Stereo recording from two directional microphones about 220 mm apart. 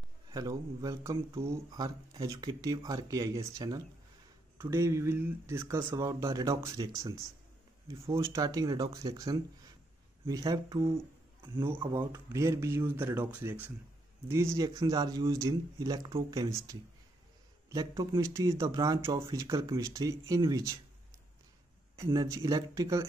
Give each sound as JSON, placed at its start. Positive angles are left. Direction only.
{"t": 0.3, "sound": "speech", "side_deg": -15}
{"t": 21.9, "sound": "speech", "side_deg": -15}